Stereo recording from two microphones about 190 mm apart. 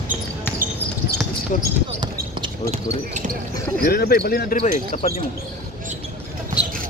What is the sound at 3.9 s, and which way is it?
Speech, 55° left (ahead or behind).